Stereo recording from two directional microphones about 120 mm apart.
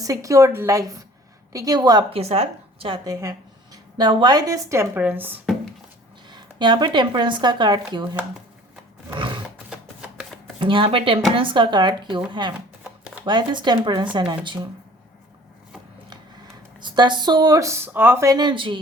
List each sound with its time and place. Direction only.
0.0 s a woman's voice: 25° right (ahead or behind)
2.0 s a woman's voice: 55° right (ahead or behind)
3.0 s a woman's voice: 30° right (ahead or behind)
6.3 s speech: 35° right (ahead or behind)
9.1 s roar: 45° right (ahead or behind)
10.6 s speech: 45° right (ahead or behind)
12.8 s a sound: 10° right (ahead or behind)
13.2 s speech: 40° right (ahead or behind)
16.8 s speech: 40° right (ahead or behind)